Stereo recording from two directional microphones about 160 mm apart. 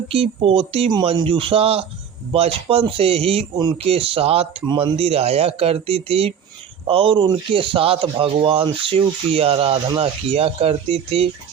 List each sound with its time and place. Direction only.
0.1 s speech: 35° right (ahead or behind)
4.9 s speech: 40° right (ahead or behind)